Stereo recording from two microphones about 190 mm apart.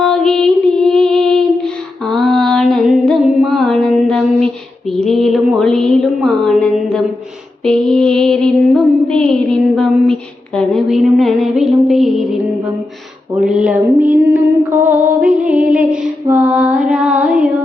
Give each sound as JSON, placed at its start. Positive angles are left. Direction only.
{"t": 0.0, "sound": "music", "side_deg": 5}
{"t": 13.3, "sound": "mantra", "side_deg": -5}